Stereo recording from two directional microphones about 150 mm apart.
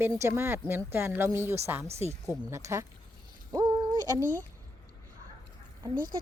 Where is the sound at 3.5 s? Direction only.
25° right (ahead or behind).